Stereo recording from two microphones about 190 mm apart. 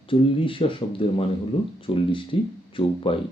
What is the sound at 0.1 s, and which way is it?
Speech, 30° left (ahead or behind).